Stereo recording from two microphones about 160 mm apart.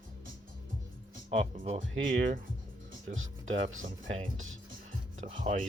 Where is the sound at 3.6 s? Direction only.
55° right (ahead or behind).